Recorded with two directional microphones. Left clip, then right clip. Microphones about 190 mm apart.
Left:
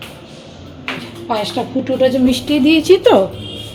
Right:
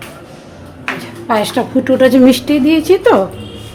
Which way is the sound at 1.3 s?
35° right (ahead or behind).